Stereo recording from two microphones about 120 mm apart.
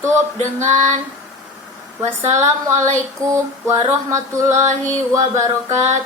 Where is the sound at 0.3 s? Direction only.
75° right (ahead or behind).